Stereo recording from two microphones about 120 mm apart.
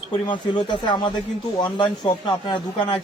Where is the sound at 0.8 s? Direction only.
40° left (ahead or behind).